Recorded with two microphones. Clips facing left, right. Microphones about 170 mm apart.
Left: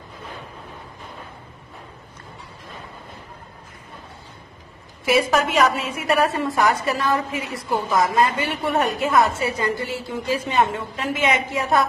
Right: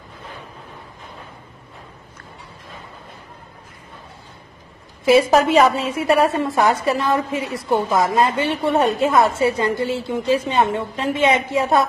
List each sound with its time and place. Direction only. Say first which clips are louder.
5.3 s a woman's voice: right 5 dB; 30° right (ahead or behind)